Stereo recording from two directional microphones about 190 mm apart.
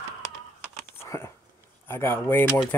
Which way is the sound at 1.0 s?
15° left (ahead or behind).